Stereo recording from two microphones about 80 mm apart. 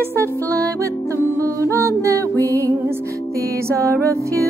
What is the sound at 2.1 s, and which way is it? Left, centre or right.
Music, left.